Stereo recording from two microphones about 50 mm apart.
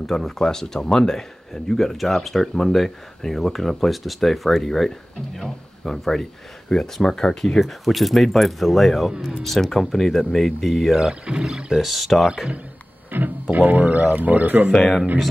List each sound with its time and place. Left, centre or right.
0.0 s speech: centre
11.0 s speech: centre
13.1 s speech: right
14.7 s speech: centre